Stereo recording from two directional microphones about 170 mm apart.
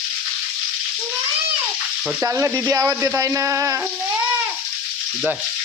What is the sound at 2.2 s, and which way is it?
Speech, 15° right (ahead or behind).